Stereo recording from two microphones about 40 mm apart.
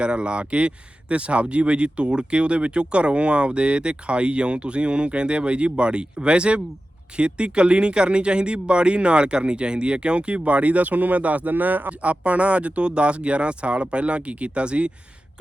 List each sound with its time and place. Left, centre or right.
0.0 s speech: right